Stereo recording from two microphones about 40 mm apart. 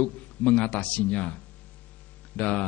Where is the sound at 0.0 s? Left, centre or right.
Left.